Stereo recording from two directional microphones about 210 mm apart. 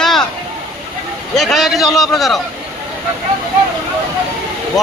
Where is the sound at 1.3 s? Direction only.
Centre (ahead or behind).